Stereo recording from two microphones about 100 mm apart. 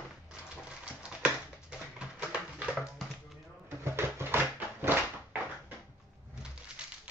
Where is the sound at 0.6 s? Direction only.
10° right (ahead or behind).